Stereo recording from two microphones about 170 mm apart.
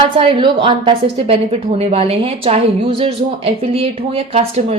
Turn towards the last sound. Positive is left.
turn(degrees=-40)  # may be behind; listen again after turning